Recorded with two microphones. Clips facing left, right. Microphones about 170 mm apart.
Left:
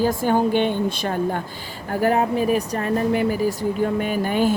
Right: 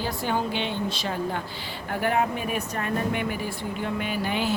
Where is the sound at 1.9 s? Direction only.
40° left (ahead or behind).